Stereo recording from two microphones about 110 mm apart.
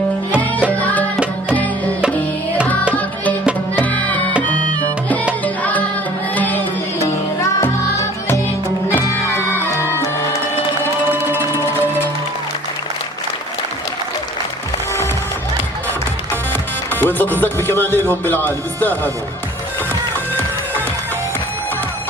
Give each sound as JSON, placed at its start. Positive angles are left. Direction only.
{"t": 0.7, "sound": "music", "side_deg": 15}
{"t": 3.8, "sound": "music", "side_deg": 15}
{"t": 6.3, "sound": "music", "side_deg": 15}
{"t": 7.0, "sound": "music", "side_deg": 30}
{"t": 11.1, "sound": "music", "side_deg": -20}
{"t": 16.3, "sound": "music", "side_deg": 15}
{"t": 17.4, "sound": "speech", "side_deg": 20}